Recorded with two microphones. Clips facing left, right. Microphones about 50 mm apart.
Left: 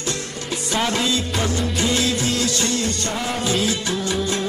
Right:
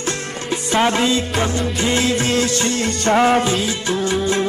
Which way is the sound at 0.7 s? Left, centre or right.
Right.